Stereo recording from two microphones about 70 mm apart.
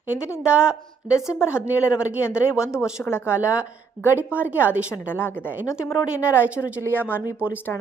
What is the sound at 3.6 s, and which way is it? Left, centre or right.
A woman's voice, right.